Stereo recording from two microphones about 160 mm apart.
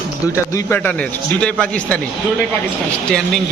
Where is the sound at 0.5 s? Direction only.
15° left (ahead or behind).